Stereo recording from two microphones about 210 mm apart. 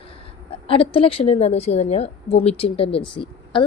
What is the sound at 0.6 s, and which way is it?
A woman's voice, 25° left (ahead or behind).